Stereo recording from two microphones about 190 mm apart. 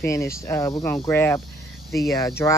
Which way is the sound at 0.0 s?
15° left (ahead or behind).